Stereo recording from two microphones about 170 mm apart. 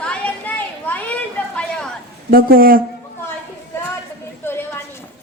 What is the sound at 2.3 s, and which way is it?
Speech, 60° right (ahead or behind).